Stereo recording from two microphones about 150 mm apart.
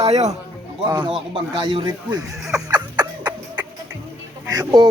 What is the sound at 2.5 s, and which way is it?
Cough, 25° right (ahead or behind).